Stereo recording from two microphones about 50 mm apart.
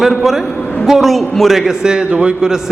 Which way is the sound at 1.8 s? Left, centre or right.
Centre.